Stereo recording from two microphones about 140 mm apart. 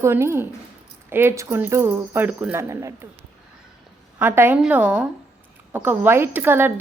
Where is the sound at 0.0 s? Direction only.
20° right (ahead or behind).